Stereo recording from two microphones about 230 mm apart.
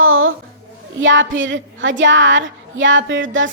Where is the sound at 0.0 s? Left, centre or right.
Right.